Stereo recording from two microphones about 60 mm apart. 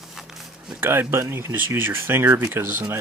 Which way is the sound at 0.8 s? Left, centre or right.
Right.